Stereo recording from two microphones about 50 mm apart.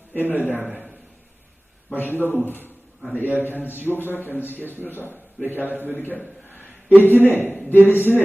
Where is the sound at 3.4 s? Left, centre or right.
Left.